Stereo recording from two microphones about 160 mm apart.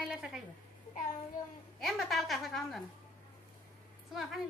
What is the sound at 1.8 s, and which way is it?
A woman's voice, centre (ahead or behind).